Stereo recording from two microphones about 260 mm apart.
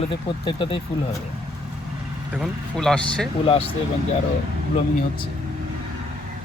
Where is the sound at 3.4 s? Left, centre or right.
Left.